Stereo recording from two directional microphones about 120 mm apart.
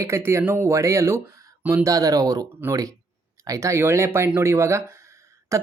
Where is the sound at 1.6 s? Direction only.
15° right (ahead or behind).